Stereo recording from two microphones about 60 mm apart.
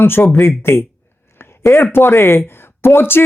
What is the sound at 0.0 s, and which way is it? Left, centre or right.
Speech, left.